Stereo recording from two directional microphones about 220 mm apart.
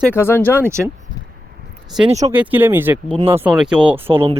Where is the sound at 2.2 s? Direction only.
10° right (ahead or behind).